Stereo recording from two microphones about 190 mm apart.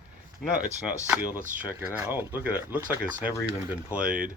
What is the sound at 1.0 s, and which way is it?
Speech, 10° right (ahead or behind).